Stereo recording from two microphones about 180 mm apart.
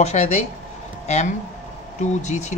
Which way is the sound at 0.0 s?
35° left (ahead or behind).